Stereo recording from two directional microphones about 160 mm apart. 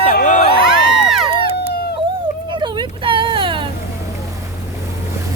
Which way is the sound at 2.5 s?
30° right (ahead or behind).